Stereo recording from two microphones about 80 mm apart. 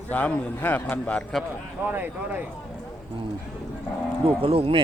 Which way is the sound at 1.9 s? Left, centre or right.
Right.